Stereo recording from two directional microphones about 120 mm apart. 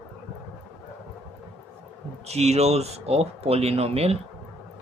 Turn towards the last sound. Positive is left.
turn(degrees=-60)  # may be behind; listen again after turning